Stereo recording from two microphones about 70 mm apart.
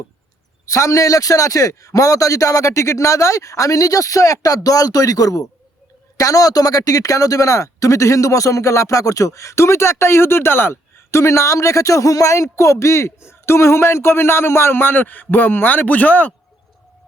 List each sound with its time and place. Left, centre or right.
0.7 s speech: left